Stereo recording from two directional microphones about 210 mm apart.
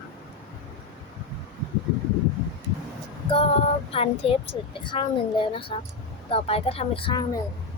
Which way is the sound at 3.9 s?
25° left (ahead or behind).